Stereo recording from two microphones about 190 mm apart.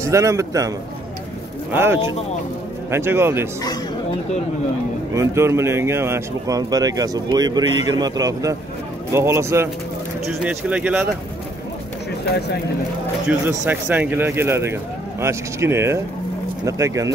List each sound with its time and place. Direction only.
0.0 s speech: 15° right (ahead or behind)
5.1 s speech: 15° right (ahead or behind)
12.3 s speech: 60° left (ahead or behind)
13.3 s speech: 10° right (ahead or behind)